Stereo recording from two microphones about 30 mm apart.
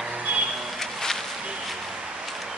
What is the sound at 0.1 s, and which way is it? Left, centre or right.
Music, right.